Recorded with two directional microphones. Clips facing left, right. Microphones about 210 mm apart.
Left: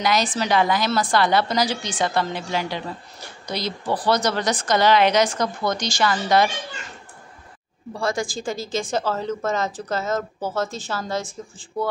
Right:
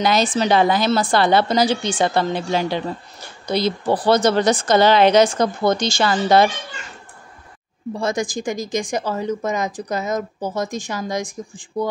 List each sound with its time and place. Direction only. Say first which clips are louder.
0.0 s speech: right 4 dB; 25° right (ahead or behind)
7.9 s a woman's voice: right 3 dB; 20° right (ahead or behind)